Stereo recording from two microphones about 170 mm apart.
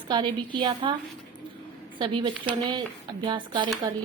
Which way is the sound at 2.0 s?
30° right (ahead or behind).